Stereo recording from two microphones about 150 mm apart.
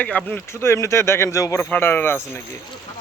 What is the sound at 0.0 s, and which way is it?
Speech, 10° left (ahead or behind).